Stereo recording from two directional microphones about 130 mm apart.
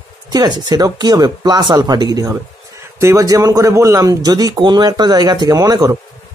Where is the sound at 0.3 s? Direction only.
30° right (ahead or behind).